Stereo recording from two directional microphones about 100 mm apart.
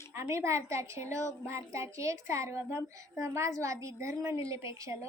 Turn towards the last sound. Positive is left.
turn(degrees=-30)  # may be behind; listen again after turning